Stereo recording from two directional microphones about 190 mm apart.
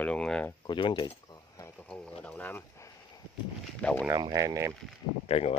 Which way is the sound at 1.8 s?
5° left (ahead or behind).